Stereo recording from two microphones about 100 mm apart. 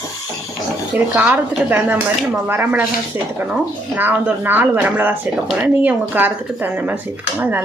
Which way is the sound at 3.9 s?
20° right (ahead or behind).